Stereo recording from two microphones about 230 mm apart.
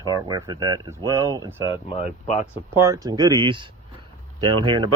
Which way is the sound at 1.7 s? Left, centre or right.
Left.